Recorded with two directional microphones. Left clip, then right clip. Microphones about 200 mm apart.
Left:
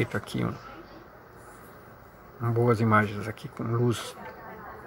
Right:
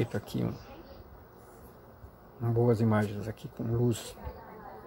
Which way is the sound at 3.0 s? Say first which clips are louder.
Left 4 dB; 30° right (ahead or behind).